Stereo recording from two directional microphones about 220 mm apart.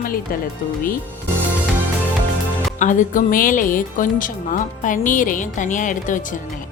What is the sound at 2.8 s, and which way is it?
A woman's voice, 35° left (ahead or behind).